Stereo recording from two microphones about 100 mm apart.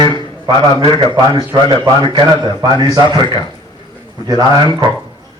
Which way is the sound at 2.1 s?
45° right (ahead or behind).